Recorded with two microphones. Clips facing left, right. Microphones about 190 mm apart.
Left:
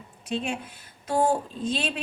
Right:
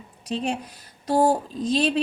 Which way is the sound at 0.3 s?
40° right (ahead or behind).